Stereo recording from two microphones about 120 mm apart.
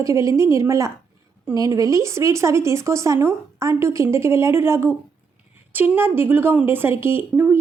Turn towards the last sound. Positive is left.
turn(degrees=-15)  # may be behind; listen again after turning